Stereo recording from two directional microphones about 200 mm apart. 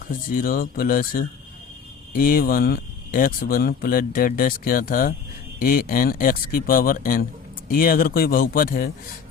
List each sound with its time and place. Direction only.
0.1 s speech: 45° left (ahead or behind)